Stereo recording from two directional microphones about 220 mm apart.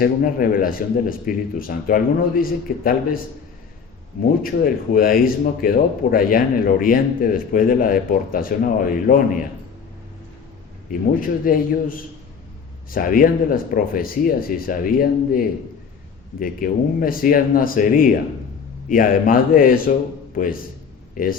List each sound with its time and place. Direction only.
0.0 s speech: 40° left (ahead or behind)
4.6 s speech: 40° left (ahead or behind)
11.2 s a man's voice: 40° left (ahead or behind)